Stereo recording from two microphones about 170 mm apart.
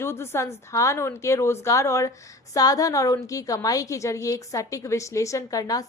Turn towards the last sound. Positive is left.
turn(degrees=20)  # may be behind; listen again after turning